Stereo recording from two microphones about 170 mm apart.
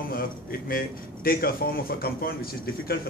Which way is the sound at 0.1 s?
60° left (ahead or behind).